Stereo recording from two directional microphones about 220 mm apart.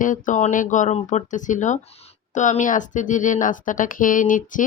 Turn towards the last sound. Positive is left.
turn(degrees=35)  # may be behind; listen again after turning